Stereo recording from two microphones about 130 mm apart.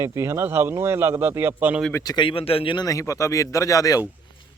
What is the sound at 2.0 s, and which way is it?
A man's voice, 35° left (ahead or behind).